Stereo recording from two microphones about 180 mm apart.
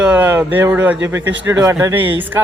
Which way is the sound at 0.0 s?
10° right (ahead or behind).